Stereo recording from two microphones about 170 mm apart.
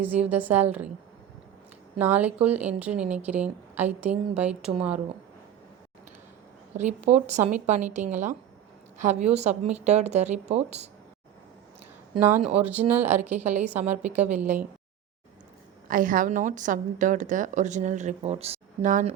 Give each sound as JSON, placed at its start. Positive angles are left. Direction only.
{"t": 0.3, "sound": "a woman's voice", "side_deg": -10}
{"t": 2.0, "sound": "a woman's voice", "side_deg": -10}
{"t": 6.7, "sound": "a woman's voice", "side_deg": -40}
{"t": 12.2, "sound": "a woman's voice", "side_deg": -10}
{"t": 13.1, "sound": "a woman's voice", "side_deg": -40}
{"t": 13.7, "sound": "a woman's voice", "side_deg": -10}
{"t": 14.0, "sound": "a woman's voice", "side_deg": -45}
{"t": 15.9, "sound": "a woman's voice", "side_deg": -55}